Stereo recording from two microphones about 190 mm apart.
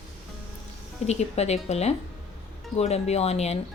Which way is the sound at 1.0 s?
35° left (ahead or behind).